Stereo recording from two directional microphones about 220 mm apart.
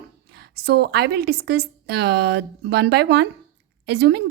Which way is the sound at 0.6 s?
45° right (ahead or behind).